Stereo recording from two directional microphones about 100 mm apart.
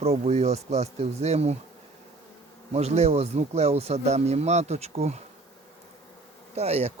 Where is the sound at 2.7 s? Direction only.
90° right.